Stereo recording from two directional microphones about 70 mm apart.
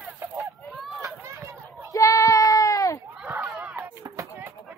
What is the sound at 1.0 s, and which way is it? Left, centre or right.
Run, right.